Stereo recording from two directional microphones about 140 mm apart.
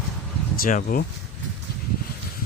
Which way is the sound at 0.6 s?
75° left (ahead or behind).